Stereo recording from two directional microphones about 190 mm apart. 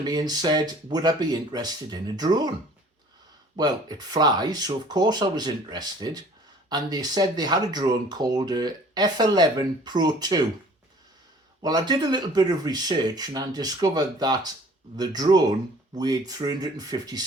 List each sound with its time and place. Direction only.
0.0 s speech: 20° right (ahead or behind)
3.5 s speech: 20° right (ahead or behind)
11.6 s speech: 20° right (ahead or behind)